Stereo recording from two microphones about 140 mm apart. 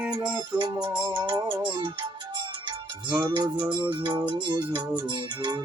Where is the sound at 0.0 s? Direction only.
5° right (ahead or behind).